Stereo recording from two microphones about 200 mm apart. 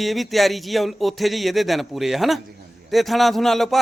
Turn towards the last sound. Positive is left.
turn(degrees=0)  # may be behind; listen again after turning